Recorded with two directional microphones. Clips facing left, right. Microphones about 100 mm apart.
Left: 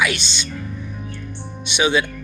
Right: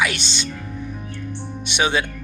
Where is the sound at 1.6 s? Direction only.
45° right (ahead or behind).